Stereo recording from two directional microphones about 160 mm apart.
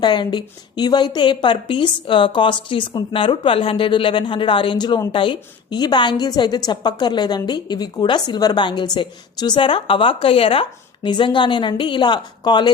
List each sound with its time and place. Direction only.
0.0 s a woman's voice: 30° left (ahead or behind)